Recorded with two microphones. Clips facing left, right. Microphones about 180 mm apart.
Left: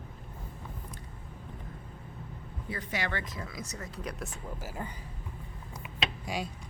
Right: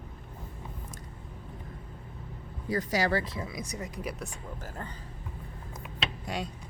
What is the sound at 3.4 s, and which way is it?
Speech, 15° right (ahead or behind).